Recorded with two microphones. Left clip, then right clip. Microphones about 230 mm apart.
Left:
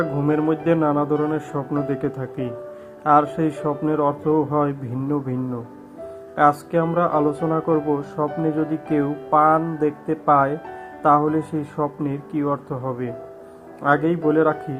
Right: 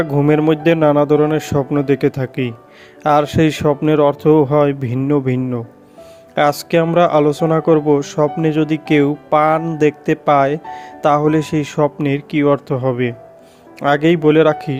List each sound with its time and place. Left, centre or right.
0.0 s speech: right